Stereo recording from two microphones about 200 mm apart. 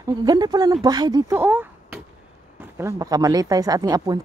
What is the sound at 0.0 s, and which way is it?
Speech, 20° right (ahead or behind).